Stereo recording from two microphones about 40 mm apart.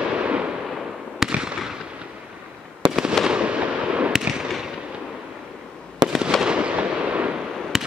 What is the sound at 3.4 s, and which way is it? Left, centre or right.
Fireworks, right.